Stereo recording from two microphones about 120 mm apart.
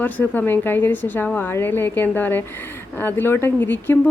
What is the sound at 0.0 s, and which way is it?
Speech, 15° left (ahead or behind).